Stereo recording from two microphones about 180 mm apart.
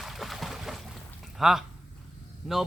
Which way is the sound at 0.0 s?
Centre (ahead or behind).